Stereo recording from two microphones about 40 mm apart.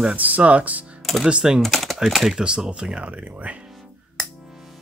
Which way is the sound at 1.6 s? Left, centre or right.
Centre.